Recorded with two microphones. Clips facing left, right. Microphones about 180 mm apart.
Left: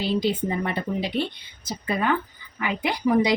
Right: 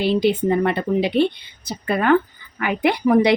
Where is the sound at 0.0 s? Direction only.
70° right (ahead or behind).